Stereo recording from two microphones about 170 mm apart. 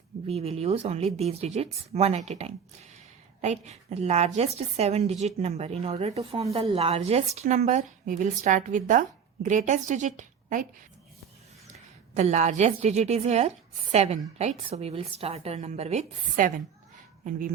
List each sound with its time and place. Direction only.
0.3 s a woman's voice: 35° right (ahead or behind)
11.7 s a woman's voice: 45° right (ahead or behind)